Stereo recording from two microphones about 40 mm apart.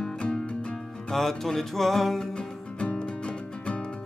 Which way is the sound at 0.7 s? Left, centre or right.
Centre.